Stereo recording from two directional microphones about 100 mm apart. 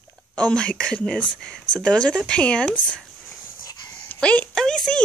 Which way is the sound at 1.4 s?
10° left (ahead or behind).